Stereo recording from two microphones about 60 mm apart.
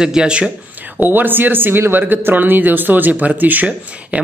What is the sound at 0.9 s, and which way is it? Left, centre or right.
Speech, right.